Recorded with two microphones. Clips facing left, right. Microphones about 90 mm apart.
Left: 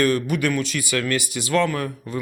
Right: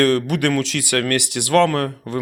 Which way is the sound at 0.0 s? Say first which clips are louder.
Right 3 dB; 85° right.